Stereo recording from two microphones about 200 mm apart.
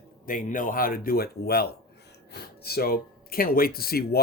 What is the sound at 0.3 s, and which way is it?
Speech, 40° left (ahead or behind).